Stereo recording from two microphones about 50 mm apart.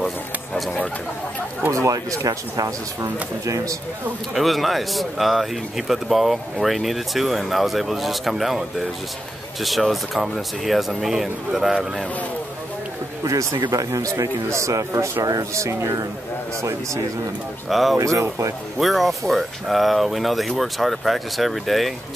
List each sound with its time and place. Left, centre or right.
1.7 s speech: right
4.3 s speech: centre
13.3 s speech: right
17.6 s speech: centre
17.9 s speech: right
18.8 s speech: centre